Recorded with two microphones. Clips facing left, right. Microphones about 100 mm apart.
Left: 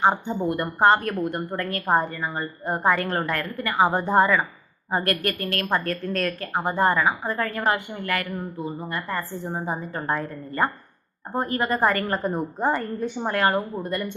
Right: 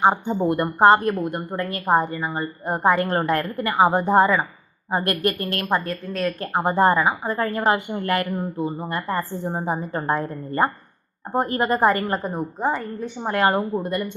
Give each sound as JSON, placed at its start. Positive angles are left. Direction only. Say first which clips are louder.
{"t": 0.0, "sound": "a woman's voice", "louder": "right 3 dB", "side_deg": -20}
{"t": 1.1, "sound": "a woman's voice", "louder": "right 1 dB", "side_deg": 0}
{"t": 1.9, "sound": "a woman's voice", "louder": "right 3 dB", "side_deg": -15}
{"t": 5.7, "sound": "a woman's voice", "louder": "right 1 dB", "side_deg": -10}
{"t": 6.4, "sound": "a woman's voice", "louder": "right 5 dB", "side_deg": -25}
{"t": 11.9, "sound": "a woman's voice", "louder": "even", "side_deg": -5}
{"t": 13.3, "sound": "a woman's voice", "louder": "right 3 dB", "side_deg": -20}